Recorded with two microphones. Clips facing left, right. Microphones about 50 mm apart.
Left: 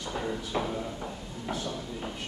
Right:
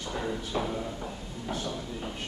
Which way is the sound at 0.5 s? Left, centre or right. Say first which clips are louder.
Even; centre.